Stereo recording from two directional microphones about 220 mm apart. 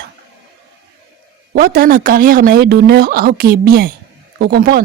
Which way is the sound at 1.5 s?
40° right (ahead or behind).